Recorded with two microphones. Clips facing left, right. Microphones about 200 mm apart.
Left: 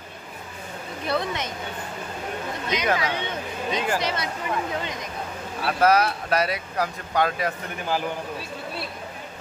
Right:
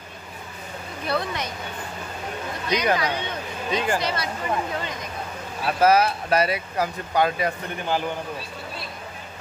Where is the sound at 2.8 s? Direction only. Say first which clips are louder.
Even; centre (ahead or behind).